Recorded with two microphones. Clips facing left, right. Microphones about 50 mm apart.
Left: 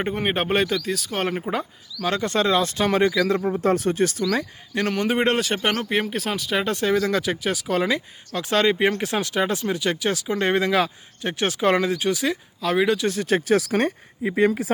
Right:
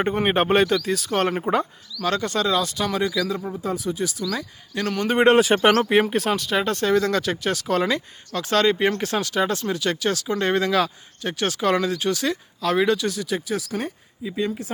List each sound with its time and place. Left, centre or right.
0.0 s speech: centre
2.0 s speech: centre
2.2 s speech: left
3.6 s speech: left
4.3 s speech: left
5.0 s speech: centre
13.0 s speech: left
13.2 s speech: left
13.6 s speech: left